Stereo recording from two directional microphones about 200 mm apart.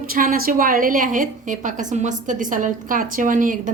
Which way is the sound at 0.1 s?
45° right (ahead or behind).